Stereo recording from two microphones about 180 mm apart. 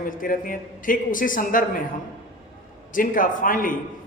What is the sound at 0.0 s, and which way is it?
A man's voice, 50° left (ahead or behind).